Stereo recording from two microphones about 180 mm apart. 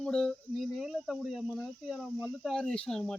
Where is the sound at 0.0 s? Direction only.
5° left (ahead or behind).